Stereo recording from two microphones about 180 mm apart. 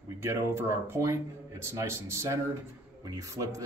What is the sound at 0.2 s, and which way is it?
Speech, 15° right (ahead or behind).